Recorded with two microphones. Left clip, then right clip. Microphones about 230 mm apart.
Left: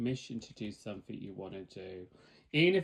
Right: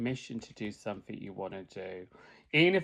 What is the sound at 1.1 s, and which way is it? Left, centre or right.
Speech, centre.